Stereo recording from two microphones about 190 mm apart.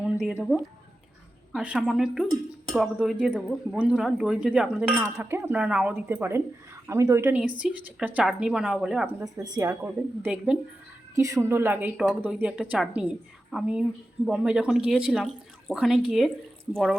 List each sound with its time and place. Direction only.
0.3 s speech: 5° right (ahead or behind)
9.2 s speech: 15° right (ahead or behind)
10.2 s speech: 5° right (ahead or behind)
11.1 s speech: 15° right (ahead or behind)